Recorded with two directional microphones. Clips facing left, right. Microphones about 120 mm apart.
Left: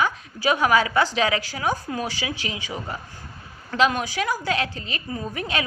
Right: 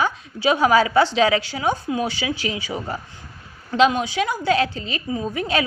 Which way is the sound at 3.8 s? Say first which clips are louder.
Right 4 dB; 20° right (ahead or behind).